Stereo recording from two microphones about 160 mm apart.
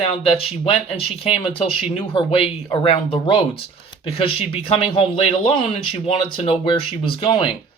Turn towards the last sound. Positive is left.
turn(degrees=35)  # may be behind; listen again after turning